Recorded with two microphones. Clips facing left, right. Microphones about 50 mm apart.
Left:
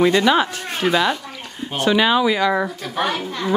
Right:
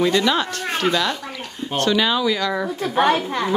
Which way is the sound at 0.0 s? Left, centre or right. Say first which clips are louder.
Left 3 dB; centre.